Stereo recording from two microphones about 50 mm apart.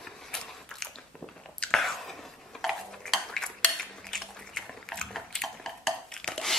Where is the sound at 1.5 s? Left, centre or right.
Centre.